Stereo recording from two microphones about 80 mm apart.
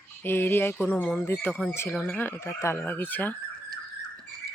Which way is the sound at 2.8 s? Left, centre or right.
Left.